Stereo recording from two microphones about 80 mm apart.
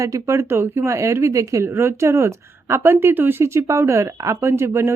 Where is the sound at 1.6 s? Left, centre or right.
Right.